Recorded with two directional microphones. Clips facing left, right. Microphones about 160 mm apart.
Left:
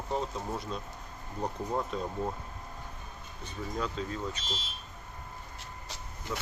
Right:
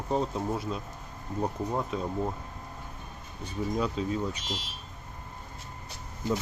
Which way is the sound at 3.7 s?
15° right (ahead or behind).